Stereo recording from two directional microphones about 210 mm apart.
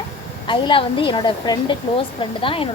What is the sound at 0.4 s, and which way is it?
Speech, 25° left (ahead or behind).